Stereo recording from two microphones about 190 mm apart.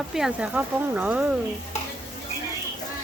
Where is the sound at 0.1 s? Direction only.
5° right (ahead or behind).